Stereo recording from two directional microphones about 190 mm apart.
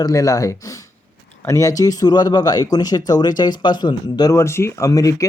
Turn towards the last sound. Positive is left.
turn(degrees=20)  # may be behind; listen again after turning